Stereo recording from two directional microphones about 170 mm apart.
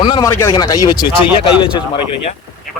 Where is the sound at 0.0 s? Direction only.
20° left (ahead or behind).